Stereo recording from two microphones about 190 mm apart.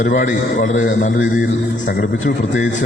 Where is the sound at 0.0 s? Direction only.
45° left (ahead or behind).